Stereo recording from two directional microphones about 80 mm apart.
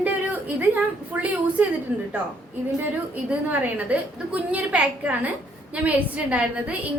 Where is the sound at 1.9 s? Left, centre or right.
Centre.